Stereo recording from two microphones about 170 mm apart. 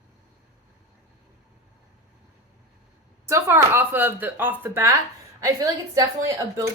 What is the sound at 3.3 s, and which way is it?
Speech, 15° right (ahead or behind).